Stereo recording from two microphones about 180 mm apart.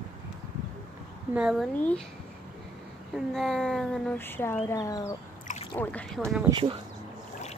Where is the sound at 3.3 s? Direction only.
5° left (ahead or behind).